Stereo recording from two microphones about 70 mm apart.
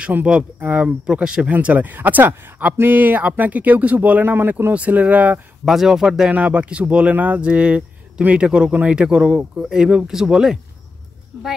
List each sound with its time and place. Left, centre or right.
0.0 s speech: centre
4.7 s speech: right
5.7 s speech: centre
6.3 s speech: right